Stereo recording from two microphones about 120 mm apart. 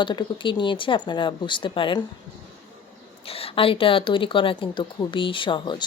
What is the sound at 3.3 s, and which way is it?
A woman's voice, 50° left (ahead or behind).